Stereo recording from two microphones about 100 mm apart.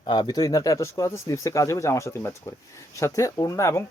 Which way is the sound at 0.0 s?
45° left (ahead or behind).